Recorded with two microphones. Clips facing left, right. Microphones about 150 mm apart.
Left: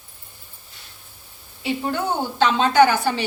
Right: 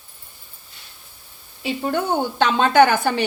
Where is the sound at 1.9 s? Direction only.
55° right (ahead or behind).